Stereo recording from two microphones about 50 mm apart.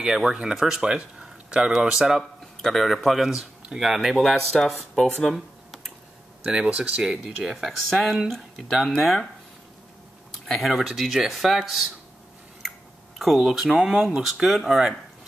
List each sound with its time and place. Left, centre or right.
0.0 s speech: centre
2.6 s speech: centre
6.4 s speech: centre
7.4 s speech: centre
10.4 s speech: centre
13.2 s speech: centre